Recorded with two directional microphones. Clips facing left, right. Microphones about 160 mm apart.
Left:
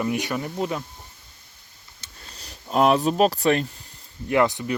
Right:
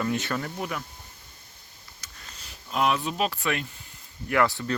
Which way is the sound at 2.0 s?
35° left (ahead or behind).